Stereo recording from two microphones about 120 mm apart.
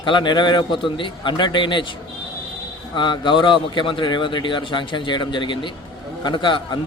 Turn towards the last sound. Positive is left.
turn(degrees=40)  # may be behind; listen again after turning